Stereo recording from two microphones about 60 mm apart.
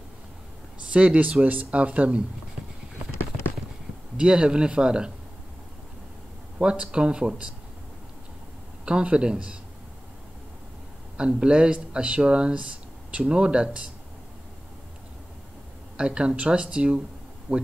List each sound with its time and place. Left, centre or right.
0.9 s speech: right
3.2 s clip-clop: left
4.2 s speech: centre
6.6 s speech: centre
8.8 s speech: centre
11.1 s speech: centre
16.0 s speech: centre